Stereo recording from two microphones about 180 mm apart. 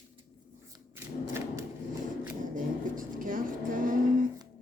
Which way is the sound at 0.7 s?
15° right (ahead or behind).